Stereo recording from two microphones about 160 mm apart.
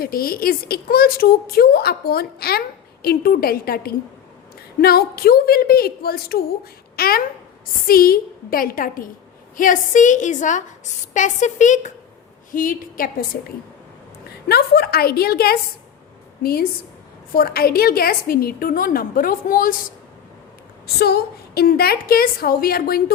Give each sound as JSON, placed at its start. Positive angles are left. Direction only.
{"t": 0.0, "sound": "a child's voice", "side_deg": 65}
{"t": 14.4, "sound": "speech", "side_deg": 75}
{"t": 20.8, "sound": "speech", "side_deg": 80}